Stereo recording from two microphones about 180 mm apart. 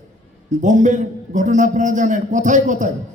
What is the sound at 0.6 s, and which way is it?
A man's voice, 45° right (ahead or behind).